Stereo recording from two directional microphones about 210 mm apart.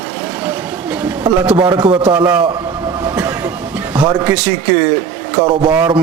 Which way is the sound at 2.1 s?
10° right (ahead or behind).